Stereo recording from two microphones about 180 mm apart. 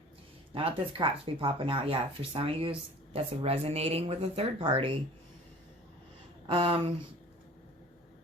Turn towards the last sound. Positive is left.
turn(degrees=-30)  # may be behind; listen again after turning